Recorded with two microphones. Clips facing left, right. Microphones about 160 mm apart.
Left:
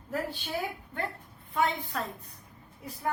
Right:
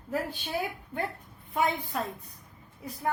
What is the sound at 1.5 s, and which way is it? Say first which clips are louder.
Speech: right 1 dB; 15° right (ahead or behind).